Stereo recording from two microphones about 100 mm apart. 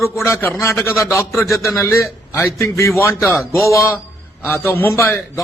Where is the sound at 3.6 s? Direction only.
30° left (ahead or behind).